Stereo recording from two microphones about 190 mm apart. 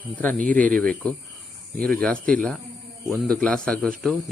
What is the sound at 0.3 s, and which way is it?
Speech, 45° right (ahead or behind).